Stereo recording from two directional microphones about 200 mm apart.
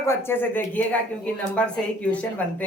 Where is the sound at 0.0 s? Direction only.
10° left (ahead or behind).